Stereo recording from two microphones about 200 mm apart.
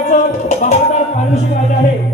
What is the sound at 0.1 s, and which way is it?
Music, 40° left (ahead or behind).